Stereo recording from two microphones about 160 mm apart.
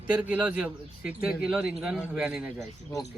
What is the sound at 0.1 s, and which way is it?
A man's voice, 5° right (ahead or behind).